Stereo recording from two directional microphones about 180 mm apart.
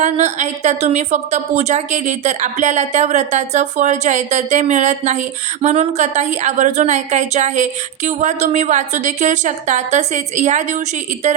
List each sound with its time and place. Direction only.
0.0 s a woman's voice: 40° right (ahead or behind)